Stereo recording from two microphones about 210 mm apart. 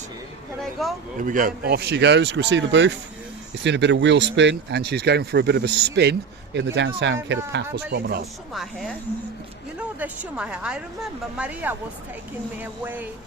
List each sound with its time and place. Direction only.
0.6 s speech: centre (ahead or behind)
1.2 s speech: 40° right (ahead or behind)
9.7 s speech: 5° right (ahead or behind)
12.8 s speech: 10° right (ahead or behind)